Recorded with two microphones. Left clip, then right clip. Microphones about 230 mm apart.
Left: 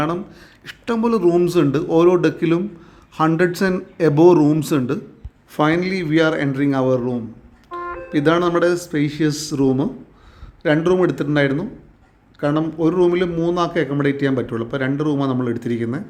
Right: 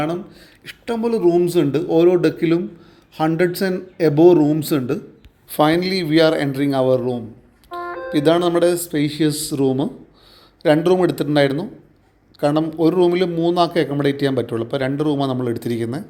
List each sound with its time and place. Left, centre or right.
0.0 s a man's voice: centre
14.9 s a man's voice: left
15.2 s a man's voice: centre